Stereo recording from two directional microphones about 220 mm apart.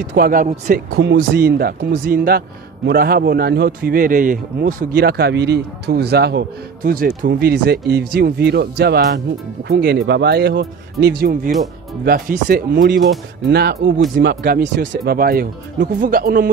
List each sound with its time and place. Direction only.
0.1 s a man's voice: 40° right (ahead or behind)
0.8 s speech: 65° right (ahead or behind)
1.1 s a man's voice: 45° right (ahead or behind)